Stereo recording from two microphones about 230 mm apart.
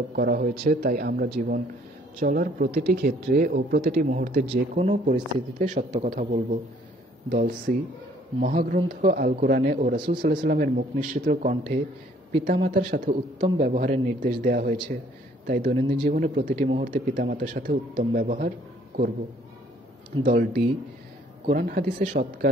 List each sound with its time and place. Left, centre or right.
0.1 s a man's voice: right
4.5 s a man's voice: right
20.2 s a man's voice: right